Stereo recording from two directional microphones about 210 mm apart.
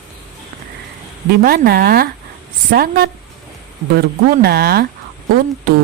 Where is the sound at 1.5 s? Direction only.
45° right (ahead or behind).